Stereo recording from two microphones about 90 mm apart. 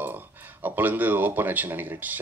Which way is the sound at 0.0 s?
20° right (ahead or behind).